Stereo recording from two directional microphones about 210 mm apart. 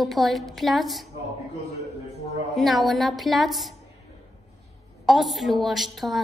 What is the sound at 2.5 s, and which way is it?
A woman's voice, centre (ahead or behind).